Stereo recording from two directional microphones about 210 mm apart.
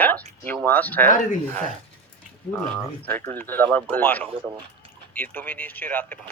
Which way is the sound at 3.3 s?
10° left (ahead or behind).